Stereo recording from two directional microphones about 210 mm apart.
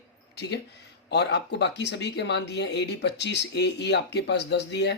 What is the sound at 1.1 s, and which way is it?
Speech, 55° left (ahead or behind).